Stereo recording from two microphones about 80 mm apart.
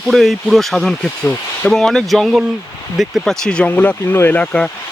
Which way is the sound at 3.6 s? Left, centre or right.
Left.